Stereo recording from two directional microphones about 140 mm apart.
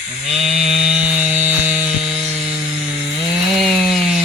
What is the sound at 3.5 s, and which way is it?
Chainsaw, 5° right (ahead or behind).